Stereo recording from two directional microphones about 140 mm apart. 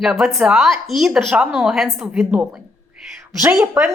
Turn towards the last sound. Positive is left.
turn(degrees=-20)  # may be behind; listen again after turning